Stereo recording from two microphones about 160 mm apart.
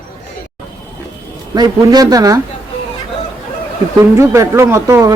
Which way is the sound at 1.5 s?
25° right (ahead or behind).